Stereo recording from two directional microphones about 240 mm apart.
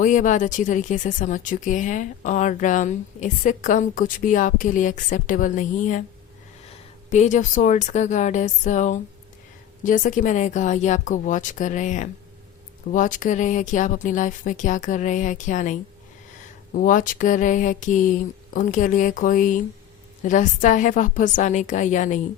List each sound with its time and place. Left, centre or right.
0.0 s speech: left
7.1 s speech: left